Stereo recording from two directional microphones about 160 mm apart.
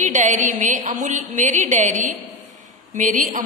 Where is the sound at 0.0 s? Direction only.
50° right (ahead or behind).